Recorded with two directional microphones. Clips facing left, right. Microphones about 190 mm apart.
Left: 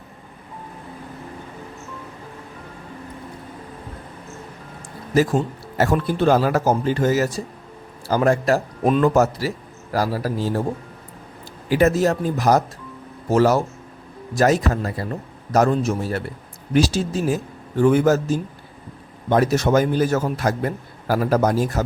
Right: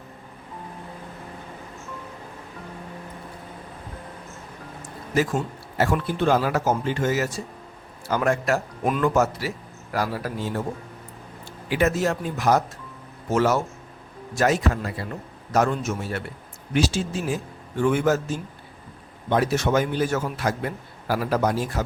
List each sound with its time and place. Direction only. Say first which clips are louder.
5.1 s a man's voice: left 5 dB; 35° left (ahead or behind)
11.7 s a man's voice: left 5 dB; 40° left (ahead or behind)